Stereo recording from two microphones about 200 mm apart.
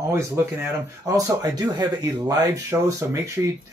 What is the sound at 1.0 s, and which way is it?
Speech, 15° right (ahead or behind).